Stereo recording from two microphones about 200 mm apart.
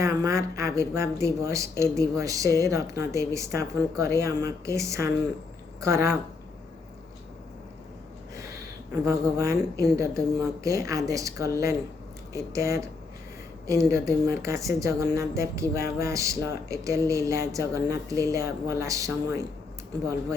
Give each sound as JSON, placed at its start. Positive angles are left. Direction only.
{"t": 0.0, "sound": "a woman's voice", "side_deg": -15}
{"t": 9.0, "sound": "a woman's voice", "side_deg": -15}